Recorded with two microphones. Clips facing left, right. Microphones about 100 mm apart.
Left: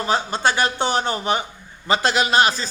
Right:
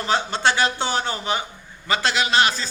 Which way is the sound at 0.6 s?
20° left (ahead or behind).